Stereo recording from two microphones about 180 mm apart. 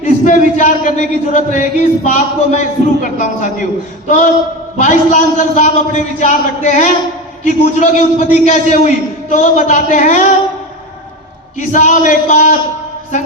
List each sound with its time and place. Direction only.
0.0 s a man's voice: 45° left (ahead or behind)
4.8 s a man's voice: 45° left (ahead or behind)
11.7 s a man's voice: 45° left (ahead or behind)